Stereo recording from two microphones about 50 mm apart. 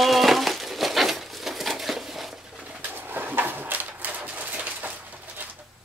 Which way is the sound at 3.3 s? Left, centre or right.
Right.